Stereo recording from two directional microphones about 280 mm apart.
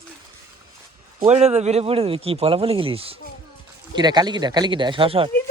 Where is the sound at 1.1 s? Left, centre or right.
Right.